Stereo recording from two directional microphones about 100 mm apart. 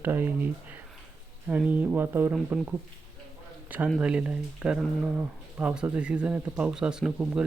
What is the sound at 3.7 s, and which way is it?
Speech, 15° right (ahead or behind).